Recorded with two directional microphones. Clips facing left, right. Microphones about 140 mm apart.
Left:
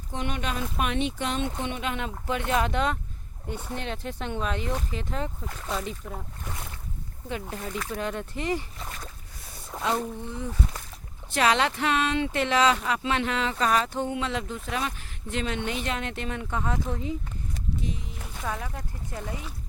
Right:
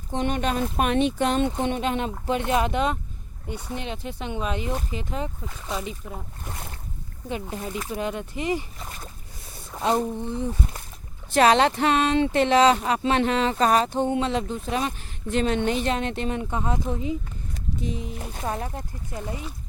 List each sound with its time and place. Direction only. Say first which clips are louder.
0.1 s speech: right 6 dB; 35° right (ahead or behind); by 6.5 s 10° right (ahead or behind)
6.5 s speech: right 2 dB; 40° right (ahead or behind)
7.5 s speech: right 2 dB; 20° right (ahead or behind)
18.3 s speech: right 3 dB; 35° right (ahead or behind)
19.2 s speech: right 4 dB; 20° right (ahead or behind)